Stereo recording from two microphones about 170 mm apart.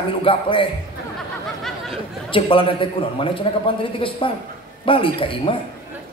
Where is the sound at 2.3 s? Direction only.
30° left (ahead or behind).